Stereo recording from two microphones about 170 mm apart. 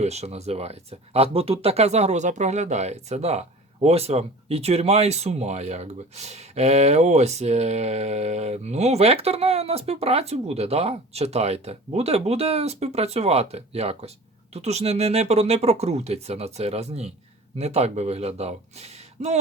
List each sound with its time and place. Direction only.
0.0 s speech: 40° right (ahead or behind)